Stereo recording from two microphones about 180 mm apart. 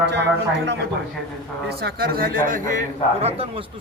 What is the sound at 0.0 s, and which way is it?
Speech, 70° right (ahead or behind).